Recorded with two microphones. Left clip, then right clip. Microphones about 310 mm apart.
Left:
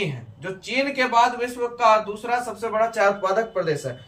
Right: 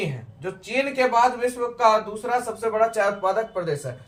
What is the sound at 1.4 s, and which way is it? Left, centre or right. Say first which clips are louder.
Speech: right 1 dB; centre.